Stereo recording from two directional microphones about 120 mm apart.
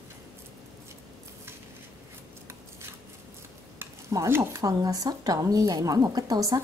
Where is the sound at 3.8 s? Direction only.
25° right (ahead or behind).